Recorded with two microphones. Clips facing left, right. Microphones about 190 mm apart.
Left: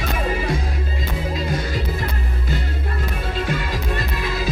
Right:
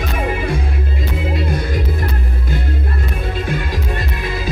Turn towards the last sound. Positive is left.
turn(degrees=-55)  # may be behind; listen again after turning